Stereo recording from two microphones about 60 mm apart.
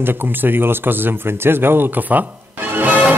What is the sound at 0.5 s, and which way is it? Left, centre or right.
Speech, right.